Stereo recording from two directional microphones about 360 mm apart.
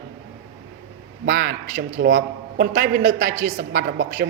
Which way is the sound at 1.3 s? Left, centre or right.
Right.